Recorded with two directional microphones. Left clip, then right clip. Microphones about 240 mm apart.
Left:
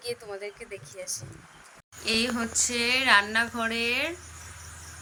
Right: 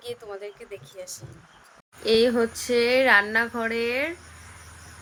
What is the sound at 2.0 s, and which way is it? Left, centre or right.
A woman's voice, right.